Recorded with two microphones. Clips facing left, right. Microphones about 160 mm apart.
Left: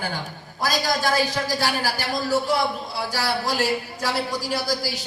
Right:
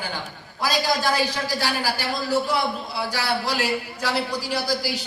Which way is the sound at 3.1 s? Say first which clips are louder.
Left 1 dB; 45° left (ahead or behind).